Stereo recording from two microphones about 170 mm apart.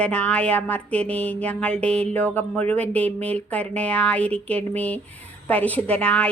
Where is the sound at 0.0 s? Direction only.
5° left (ahead or behind).